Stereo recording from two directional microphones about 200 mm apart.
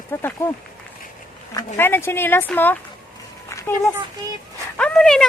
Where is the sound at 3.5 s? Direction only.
15° left (ahead or behind).